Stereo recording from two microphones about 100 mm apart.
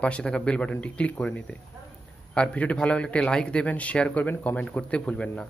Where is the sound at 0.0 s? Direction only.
10° left (ahead or behind).